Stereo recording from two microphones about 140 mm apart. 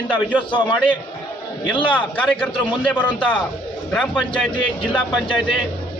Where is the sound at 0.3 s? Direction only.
35° left (ahead or behind).